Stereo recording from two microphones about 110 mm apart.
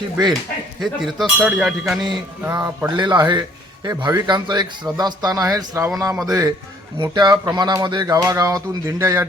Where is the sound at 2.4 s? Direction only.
20° right (ahead or behind).